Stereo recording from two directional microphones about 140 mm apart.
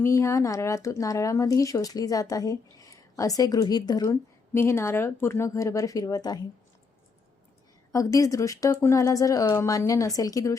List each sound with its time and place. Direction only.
0.0 s speech: 20° left (ahead or behind)
7.9 s speech: 20° left (ahead or behind)